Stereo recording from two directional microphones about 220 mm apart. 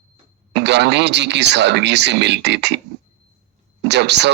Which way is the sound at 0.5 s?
50° right (ahead or behind).